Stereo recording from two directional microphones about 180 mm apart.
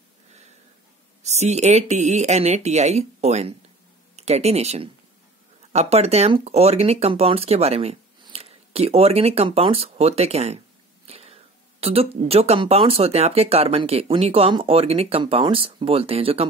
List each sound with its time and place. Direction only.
1.2 s speech: 40° right (ahead or behind)